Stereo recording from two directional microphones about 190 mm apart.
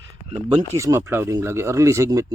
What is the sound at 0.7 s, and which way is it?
Speech, 15° right (ahead or behind).